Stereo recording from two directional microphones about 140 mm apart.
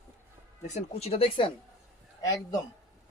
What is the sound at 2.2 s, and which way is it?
Speech, 25° left (ahead or behind).